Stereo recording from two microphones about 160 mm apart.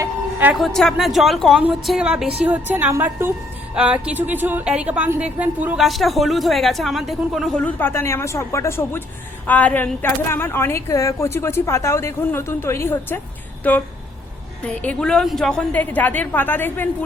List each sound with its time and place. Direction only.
0.0 s music: 10° right (ahead or behind)
0.5 s a woman's voice: centre (ahead or behind)
14.7 s a woman's voice: 10° left (ahead or behind)